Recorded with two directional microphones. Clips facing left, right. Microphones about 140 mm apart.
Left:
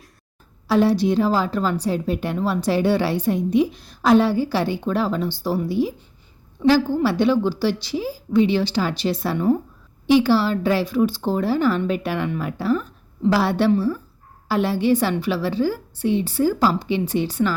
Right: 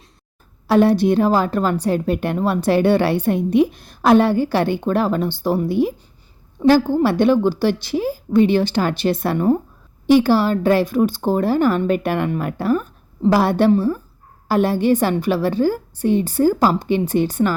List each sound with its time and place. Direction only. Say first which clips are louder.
0.7 s a woman's voice: right 3 dB; 55° right (ahead or behind)